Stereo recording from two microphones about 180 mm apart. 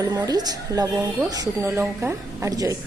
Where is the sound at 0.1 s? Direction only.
20° right (ahead or behind).